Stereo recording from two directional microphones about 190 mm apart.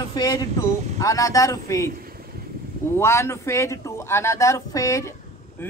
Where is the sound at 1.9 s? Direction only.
50° right (ahead or behind).